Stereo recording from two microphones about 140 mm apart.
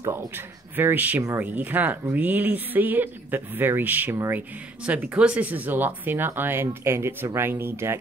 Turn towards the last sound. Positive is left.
turn(degrees=-15)  # may be behind; listen again after turning